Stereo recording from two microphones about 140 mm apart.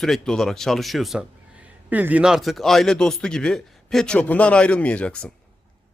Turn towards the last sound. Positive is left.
turn(degrees=5)  # may be behind; listen again after turning